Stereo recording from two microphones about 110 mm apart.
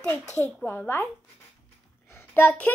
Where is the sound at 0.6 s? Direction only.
20° left (ahead or behind).